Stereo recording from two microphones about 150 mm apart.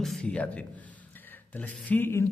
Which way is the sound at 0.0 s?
5° left (ahead or behind).